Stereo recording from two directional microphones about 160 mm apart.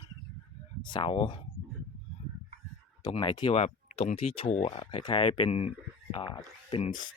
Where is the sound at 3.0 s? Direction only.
30° left (ahead or behind).